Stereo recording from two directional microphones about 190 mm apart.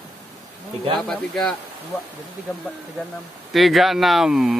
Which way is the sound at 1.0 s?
Centre (ahead or behind).